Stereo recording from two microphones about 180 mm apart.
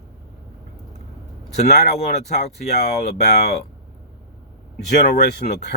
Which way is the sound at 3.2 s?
60° left (ahead or behind).